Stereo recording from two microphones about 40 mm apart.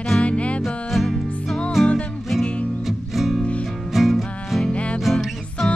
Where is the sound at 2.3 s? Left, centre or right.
Centre.